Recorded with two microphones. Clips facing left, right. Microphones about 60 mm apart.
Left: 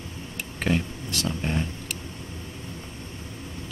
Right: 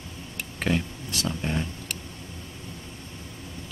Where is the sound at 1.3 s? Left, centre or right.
Centre.